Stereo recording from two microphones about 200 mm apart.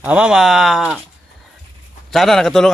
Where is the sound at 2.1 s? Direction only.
Centre (ahead or behind).